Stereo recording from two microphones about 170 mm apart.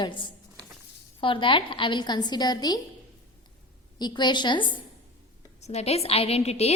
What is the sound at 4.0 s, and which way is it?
Speech, 25° left (ahead or behind).